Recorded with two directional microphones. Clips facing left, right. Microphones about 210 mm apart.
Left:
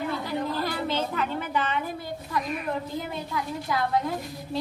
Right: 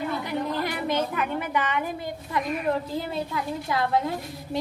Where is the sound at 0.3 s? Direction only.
20° right (ahead or behind).